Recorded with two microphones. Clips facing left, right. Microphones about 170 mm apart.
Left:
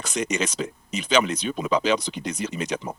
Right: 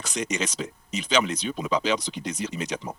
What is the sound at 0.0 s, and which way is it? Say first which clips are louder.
Speech: left 3 dB; 55° left (ahead or behind).